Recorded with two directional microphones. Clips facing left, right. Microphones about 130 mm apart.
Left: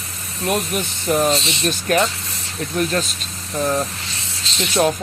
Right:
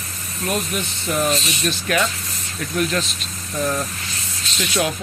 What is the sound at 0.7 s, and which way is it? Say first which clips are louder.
Speech: left 2 dB; 45° left (ahead or behind).